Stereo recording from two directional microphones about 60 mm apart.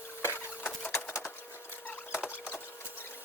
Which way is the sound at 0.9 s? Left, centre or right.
Left.